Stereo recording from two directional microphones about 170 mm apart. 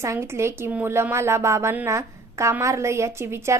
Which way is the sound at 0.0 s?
15° right (ahead or behind).